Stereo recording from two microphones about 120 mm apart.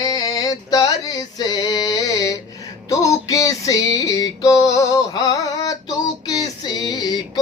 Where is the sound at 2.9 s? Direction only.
30° left (ahead or behind).